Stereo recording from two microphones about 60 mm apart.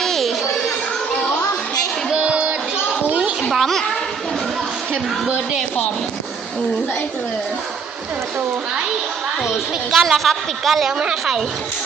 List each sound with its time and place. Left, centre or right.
0.0 s music: centre
2.0 s child singing: centre
3.1 s a sound: centre
3.5 s a woman's voice: centre
9.4 s a woman's voice: centre